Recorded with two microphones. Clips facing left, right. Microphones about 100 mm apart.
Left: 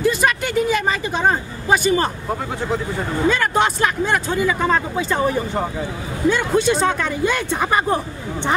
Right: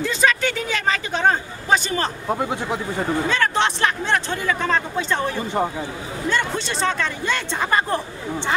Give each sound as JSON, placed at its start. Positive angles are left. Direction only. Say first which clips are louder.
{"t": 0.0, "sound": "vehicle", "louder": "left 2 dB", "side_deg": 10}
{"t": 2.2, "sound": "speech", "louder": "even", "side_deg": -15}
{"t": 3.3, "sound": "speech", "louder": "left 6 dB", "side_deg": 10}